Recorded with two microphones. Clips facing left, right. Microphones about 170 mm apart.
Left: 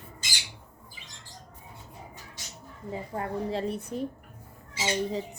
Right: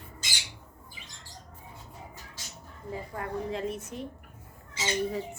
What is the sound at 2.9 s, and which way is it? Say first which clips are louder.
A woman's voice: left 2 dB; 25° left (ahead or behind).